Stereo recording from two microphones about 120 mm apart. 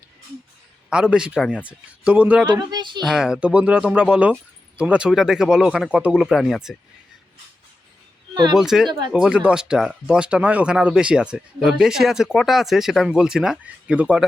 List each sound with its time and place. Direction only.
0.9 s a man's voice: 5° right (ahead or behind)
2.5 s speech: 35° right (ahead or behind)
3.0 s a man's voice: 5° right (ahead or behind)
8.5 s speech: 5° right (ahead or behind)